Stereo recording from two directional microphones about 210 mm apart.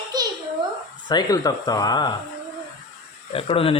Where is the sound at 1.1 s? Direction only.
20° left (ahead or behind).